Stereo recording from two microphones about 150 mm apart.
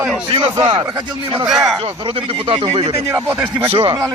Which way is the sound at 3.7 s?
35° right (ahead or behind).